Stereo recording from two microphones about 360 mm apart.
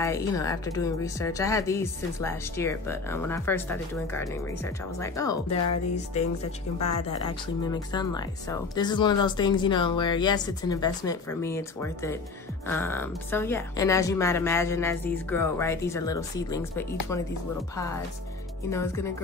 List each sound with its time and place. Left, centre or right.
0.0 s a woman's voice: centre
18.7 s a woman's voice: centre